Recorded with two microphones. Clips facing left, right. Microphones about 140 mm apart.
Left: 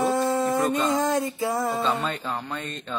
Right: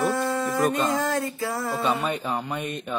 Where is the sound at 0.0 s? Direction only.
20° left (ahead or behind).